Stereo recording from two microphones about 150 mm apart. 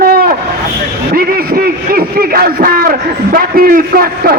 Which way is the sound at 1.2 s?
85° right.